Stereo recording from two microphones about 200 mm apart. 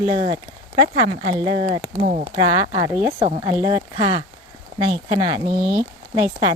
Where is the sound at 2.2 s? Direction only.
25° right (ahead or behind).